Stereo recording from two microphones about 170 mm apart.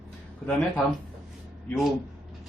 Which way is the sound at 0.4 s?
Centre (ahead or behind).